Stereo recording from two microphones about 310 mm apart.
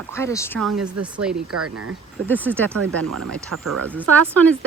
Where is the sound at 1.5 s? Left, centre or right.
Right.